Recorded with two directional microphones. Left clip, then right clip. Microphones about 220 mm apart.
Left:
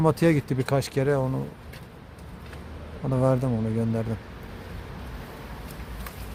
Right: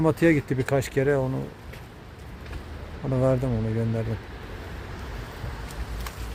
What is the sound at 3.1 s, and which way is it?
Speech, 5° left (ahead or behind).